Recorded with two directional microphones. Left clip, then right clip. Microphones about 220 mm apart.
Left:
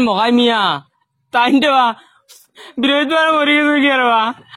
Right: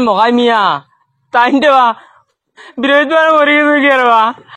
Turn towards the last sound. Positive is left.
turn(degrees=40)  # may be behind; listen again after turning